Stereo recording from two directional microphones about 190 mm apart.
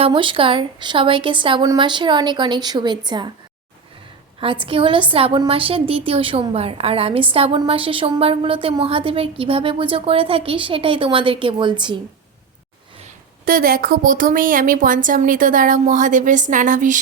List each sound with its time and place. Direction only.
0.0 s a woman's voice: 25° right (ahead or behind)
4.4 s a woman's voice: 25° right (ahead or behind)
13.4 s a woman's voice: 50° right (ahead or behind)